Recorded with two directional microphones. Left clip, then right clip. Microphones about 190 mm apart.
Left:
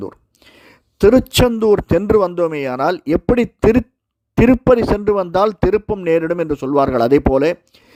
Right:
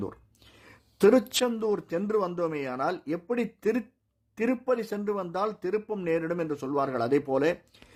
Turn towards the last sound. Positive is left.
turn(degrees=35)  # may be behind; listen again after turning